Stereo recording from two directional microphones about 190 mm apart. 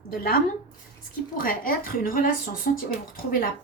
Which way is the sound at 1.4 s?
45° left (ahead or behind).